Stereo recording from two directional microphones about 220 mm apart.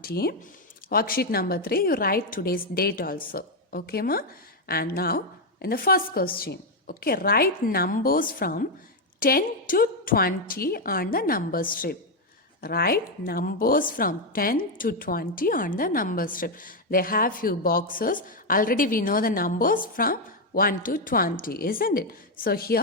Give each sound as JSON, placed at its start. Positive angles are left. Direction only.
{"t": 0.0, "sound": "a woman's voice", "side_deg": 45}